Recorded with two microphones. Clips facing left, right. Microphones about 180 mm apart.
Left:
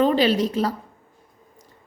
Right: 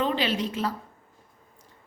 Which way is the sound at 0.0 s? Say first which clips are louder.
Left 8 dB; 40° left (ahead or behind).